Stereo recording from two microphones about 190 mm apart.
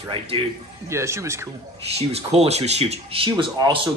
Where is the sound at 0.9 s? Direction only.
15° right (ahead or behind).